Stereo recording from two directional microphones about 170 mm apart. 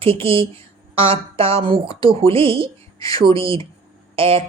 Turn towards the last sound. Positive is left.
turn(degrees=-35)  # may be behind; listen again after turning